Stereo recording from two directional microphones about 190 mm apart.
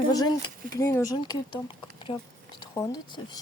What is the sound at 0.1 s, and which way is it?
Speech, 20° left (ahead or behind).